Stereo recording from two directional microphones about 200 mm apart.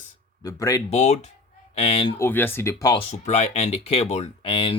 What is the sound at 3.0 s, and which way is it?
Speech, 35° left (ahead or behind).